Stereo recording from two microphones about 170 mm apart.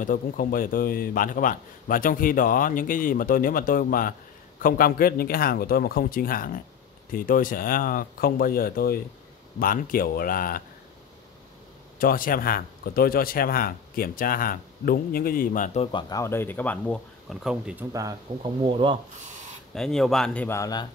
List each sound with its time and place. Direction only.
0.0 s a man's voice: 55° left (ahead or behind)
12.0 s a man's voice: 55° left (ahead or behind)
15.9 s speech: 25° left (ahead or behind); by 17.8 s 5° right (ahead or behind)
18.4 s speech: 30° right (ahead or behind)
19.7 s speech: centre (ahead or behind)
20.4 s speech: 20° left (ahead or behind)